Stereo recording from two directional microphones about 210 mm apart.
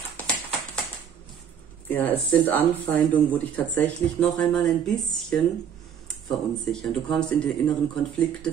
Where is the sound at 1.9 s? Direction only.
10° left (ahead or behind).